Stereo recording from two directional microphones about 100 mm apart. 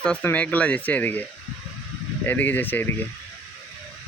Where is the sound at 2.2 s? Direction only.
15° left (ahead or behind).